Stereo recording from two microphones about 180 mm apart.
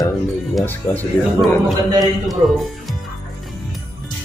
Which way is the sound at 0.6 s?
10° left (ahead or behind).